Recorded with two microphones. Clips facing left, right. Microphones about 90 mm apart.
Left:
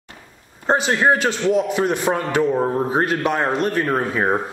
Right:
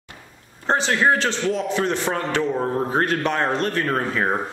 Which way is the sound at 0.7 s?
10° left (ahead or behind).